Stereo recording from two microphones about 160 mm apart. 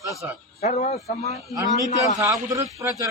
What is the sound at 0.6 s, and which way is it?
Speech, 45° left (ahead or behind).